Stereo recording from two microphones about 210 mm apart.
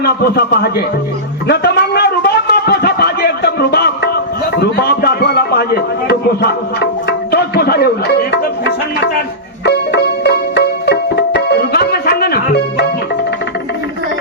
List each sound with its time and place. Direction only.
0.0 s speech: 50° left (ahead or behind)
1.5 s a sound: 50° left (ahead or behind)
7.3 s music: 50° left (ahead or behind)